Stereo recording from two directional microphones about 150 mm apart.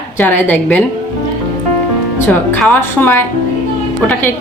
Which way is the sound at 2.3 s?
10° left (ahead or behind).